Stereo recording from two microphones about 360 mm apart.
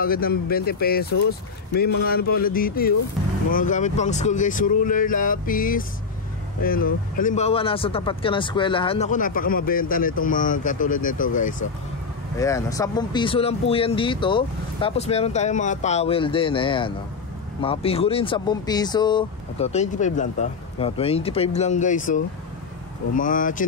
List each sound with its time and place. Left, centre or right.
0.0 s speech: left
12.4 s speech: centre